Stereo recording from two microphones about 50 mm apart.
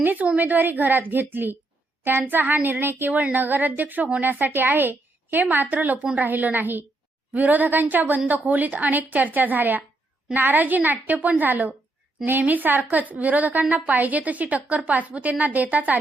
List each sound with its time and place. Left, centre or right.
0.0 s a woman's voice: right
6.0 s speech: right
6.2 s a woman's voice: right